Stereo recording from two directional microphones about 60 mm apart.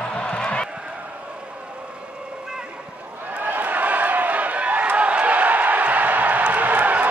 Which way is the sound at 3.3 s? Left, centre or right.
Right.